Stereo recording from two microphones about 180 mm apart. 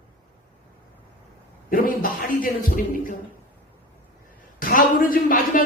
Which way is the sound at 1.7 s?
50° left (ahead or behind).